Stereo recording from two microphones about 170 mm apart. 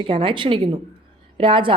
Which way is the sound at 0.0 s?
30° right (ahead or behind).